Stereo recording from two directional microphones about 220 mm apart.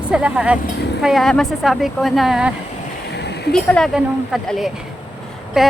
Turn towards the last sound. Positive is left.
turn(degrees=0)  # may be behind; listen again after turning